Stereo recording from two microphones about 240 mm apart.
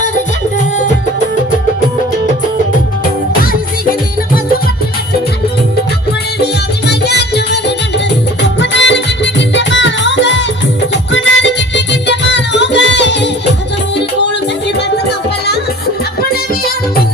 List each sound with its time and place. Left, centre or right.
6.4 s music: left